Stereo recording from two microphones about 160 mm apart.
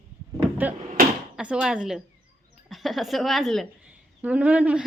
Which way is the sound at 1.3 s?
5° right (ahead or behind).